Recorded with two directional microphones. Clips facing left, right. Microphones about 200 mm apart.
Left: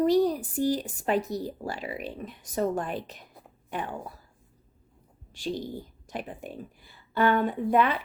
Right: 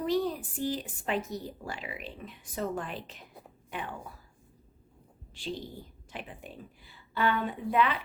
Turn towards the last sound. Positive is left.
turn(degrees=45)  # may be behind; listen again after turning